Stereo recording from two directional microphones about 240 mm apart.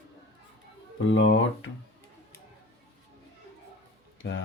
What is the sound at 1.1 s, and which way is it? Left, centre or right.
Speech, left.